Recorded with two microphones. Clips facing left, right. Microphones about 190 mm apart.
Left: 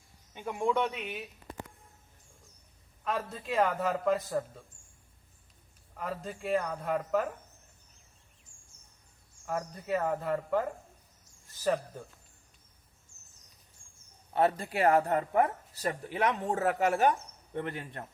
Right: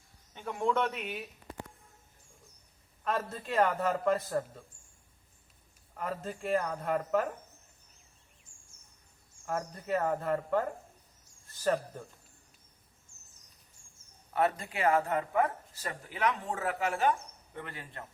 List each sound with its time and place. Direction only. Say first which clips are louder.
0.3 s a man's voice: left 1 dB; 10° left (ahead or behind)
3.0 s a man's voice: right 1 dB; centre (ahead or behind)
6.0 s a man's voice: right 1 dB; centre (ahead or behind)
9.5 s a man's voice: even; 5° left (ahead or behind)
14.3 s speech: left 3 dB; 30° left (ahead or behind)